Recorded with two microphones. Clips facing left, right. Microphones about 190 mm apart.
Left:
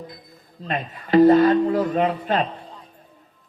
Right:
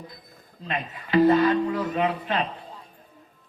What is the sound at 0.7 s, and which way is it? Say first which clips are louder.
A man's voice: left 5 dB; 40° left (ahead or behind).